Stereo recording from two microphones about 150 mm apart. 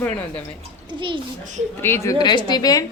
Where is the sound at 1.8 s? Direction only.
15° left (ahead or behind).